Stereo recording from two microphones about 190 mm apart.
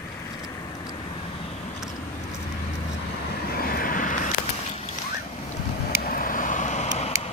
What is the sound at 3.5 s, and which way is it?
Vehicle, 50° left (ahead or behind).